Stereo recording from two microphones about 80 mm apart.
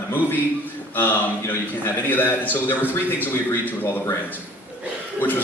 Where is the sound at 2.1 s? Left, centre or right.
Left.